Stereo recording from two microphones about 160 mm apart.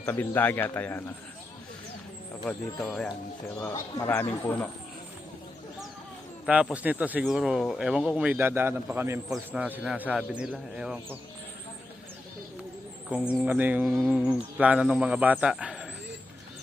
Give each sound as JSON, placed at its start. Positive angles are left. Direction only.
{"t": 0.0, "sound": "speech", "side_deg": 10}
{"t": 2.8, "sound": "speech", "side_deg": 5}
{"t": 3.6, "sound": "speech", "side_deg": 20}
{"t": 6.4, "sound": "speech", "side_deg": -5}
{"t": 13.3, "sound": "speech", "side_deg": -10}